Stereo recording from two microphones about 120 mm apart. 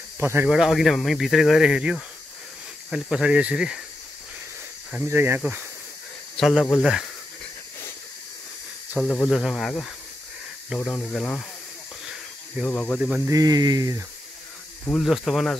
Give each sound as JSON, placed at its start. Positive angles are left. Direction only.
{"t": 0.2, "sound": "speech", "side_deg": -20}
{"t": 0.5, "sound": "speech", "side_deg": -5}
{"t": 5.0, "sound": "speech", "side_deg": -20}
{"t": 6.3, "sound": "speech", "side_deg": 0}
{"t": 9.0, "sound": "speech", "side_deg": 15}
{"t": 9.3, "sound": "speech", "side_deg": 0}
{"t": 12.1, "sound": "snake", "side_deg": -5}
{"t": 12.7, "sound": "speech", "side_deg": 10}
{"t": 13.3, "sound": "speech", "side_deg": -30}
{"t": 14.9, "sound": "speech", "side_deg": 0}